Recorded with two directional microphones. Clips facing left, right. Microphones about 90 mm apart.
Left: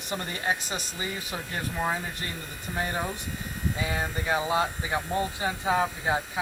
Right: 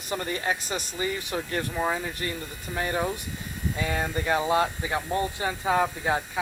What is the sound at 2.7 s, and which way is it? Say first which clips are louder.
A man's voice: right 3 dB; 10° left (ahead or behind).